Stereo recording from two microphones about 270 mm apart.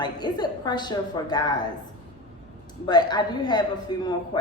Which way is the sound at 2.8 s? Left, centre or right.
Centre.